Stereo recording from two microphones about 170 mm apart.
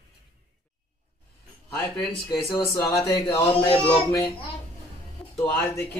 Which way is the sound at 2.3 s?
20° left (ahead or behind).